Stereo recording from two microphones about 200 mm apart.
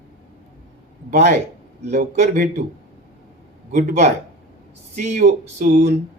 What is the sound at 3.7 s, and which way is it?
A man's voice, 40° right (ahead or behind).